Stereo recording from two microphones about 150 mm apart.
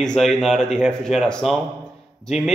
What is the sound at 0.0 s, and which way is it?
Speech, 5° left (ahead or behind).